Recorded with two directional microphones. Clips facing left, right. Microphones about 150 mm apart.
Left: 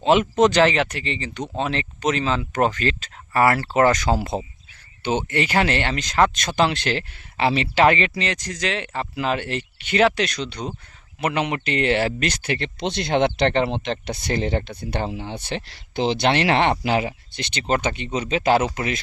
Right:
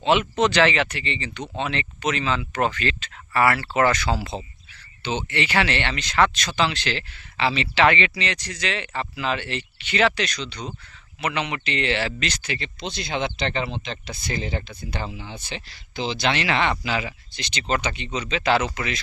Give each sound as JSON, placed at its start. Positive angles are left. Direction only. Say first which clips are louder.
{"t": 0.0, "sound": "speech", "louder": "left 4 dB", "side_deg": 40}
{"t": 0.6, "sound": "speech", "louder": "left 2 dB", "side_deg": 0}
{"t": 1.3, "sound": "speech", "louder": "left 3 dB", "side_deg": 40}
{"t": 1.6, "sound": "speech", "louder": "left 2 dB", "side_deg": 0}
{"t": 2.0, "sound": "speech", "louder": "left 3 dB", "side_deg": 40}
{"t": 5.6, "sound": "speech", "louder": "left 3 dB", "side_deg": 0}
{"t": 5.9, "sound": "speech", "louder": "left 2 dB", "side_deg": 45}
{"t": 8.0, "sound": "speech", "louder": "left 2 dB", "side_deg": 0}
{"t": 11.3, "sound": "speech", "louder": "left 5 dB", "side_deg": 50}